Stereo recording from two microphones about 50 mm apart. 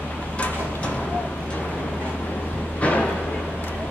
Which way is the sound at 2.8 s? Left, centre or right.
Left.